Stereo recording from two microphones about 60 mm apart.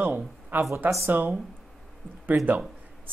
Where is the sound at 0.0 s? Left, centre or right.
Right.